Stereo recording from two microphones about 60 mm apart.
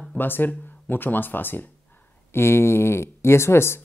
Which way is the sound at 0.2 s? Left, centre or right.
Left.